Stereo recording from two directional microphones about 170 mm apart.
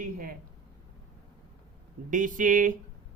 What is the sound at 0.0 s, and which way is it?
Speech, 60° right (ahead or behind).